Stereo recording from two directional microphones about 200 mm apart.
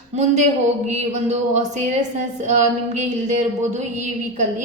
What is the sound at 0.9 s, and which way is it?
A woman's voice, 35° right (ahead or behind).